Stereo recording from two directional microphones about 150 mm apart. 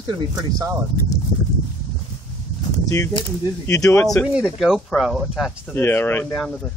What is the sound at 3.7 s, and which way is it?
Speech, 20° left (ahead or behind).